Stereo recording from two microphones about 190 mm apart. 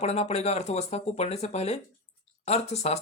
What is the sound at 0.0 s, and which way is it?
Speech, 35° left (ahead or behind).